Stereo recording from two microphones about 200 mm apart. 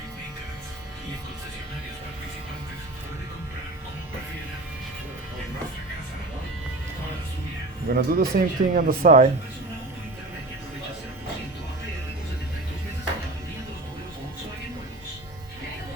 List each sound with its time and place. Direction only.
7.9 s speech: 50° right (ahead or behind)